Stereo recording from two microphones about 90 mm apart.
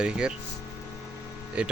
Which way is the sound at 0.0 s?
10° right (ahead or behind).